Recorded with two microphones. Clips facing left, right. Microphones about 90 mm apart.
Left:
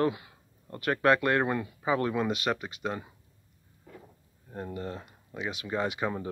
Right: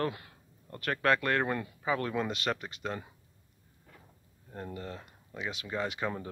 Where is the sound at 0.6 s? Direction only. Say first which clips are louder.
Left 4 dB; 20° left (ahead or behind).